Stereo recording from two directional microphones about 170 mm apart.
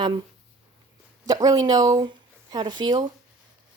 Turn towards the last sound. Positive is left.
turn(degrees=-25)  # may be behind; listen again after turning